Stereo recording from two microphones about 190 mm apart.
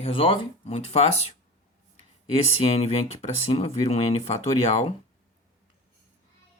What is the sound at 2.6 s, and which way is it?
Speech, 30° left (ahead or behind).